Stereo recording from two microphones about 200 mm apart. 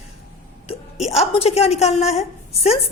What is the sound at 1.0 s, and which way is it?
A woman's voice, 30° left (ahead or behind).